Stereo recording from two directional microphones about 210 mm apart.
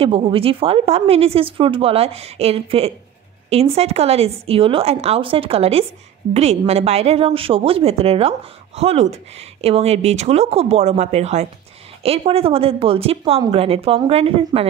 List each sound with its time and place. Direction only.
0.0 s a woman's voice: 25° right (ahead or behind)